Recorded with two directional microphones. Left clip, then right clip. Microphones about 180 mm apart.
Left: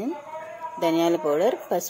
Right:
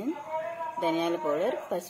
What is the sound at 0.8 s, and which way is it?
Speech, 60° left (ahead or behind).